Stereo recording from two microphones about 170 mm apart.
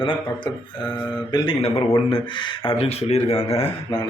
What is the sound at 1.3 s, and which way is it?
A man's voice, 25° left (ahead or behind).